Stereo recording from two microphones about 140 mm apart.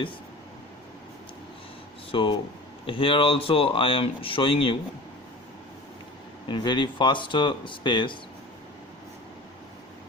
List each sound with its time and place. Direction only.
2.1 s speech: 40° left (ahead or behind)
6.5 s speech: 35° left (ahead or behind)